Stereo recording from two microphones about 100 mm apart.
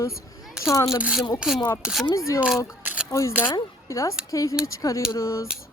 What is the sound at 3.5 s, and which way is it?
Speech, 30° left (ahead or behind).